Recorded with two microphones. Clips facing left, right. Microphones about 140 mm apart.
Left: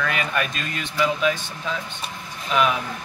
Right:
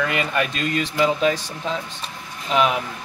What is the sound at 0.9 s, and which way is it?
Speech, 30° right (ahead or behind).